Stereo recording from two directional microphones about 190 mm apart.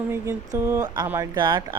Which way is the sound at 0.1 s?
15° right (ahead or behind).